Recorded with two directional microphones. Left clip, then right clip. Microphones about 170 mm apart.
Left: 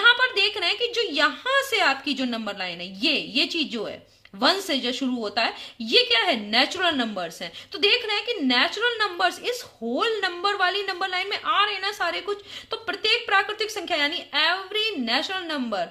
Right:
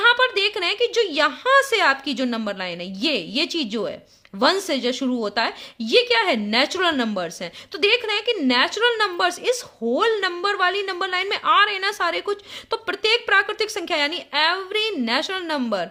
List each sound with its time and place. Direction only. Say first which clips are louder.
0.0 s a woman's voice: right 1 dB; 40° right (ahead or behind)